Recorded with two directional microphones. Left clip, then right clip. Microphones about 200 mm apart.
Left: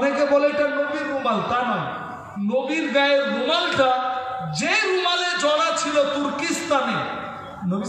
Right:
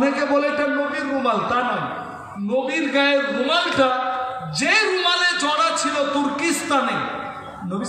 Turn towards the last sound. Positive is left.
turn(degrees=-35)  # may be behind; listen again after turning